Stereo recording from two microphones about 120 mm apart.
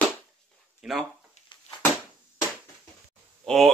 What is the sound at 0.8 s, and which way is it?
Speech, 5° right (ahead or behind).